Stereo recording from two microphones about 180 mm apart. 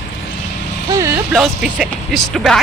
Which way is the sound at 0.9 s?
15° right (ahead or behind).